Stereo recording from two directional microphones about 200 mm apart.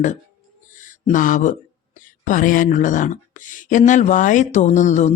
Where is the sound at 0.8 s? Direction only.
40° left (ahead or behind).